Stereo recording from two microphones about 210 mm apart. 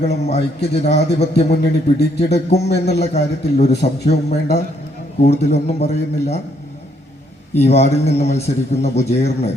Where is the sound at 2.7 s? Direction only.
50° left (ahead or behind).